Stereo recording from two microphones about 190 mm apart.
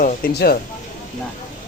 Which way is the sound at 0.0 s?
55° left (ahead or behind).